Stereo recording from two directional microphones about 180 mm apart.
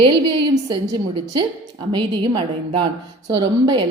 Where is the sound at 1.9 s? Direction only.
25° right (ahead or behind).